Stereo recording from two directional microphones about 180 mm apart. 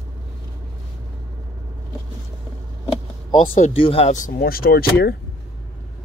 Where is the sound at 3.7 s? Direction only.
30° left (ahead or behind); by 5.1 s 60° left (ahead or behind).